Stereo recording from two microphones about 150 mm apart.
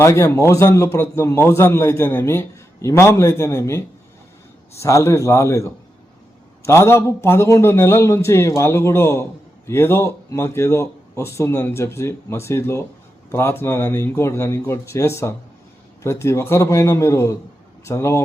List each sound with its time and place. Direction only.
0.0 s a man's voice: 20° left (ahead or behind)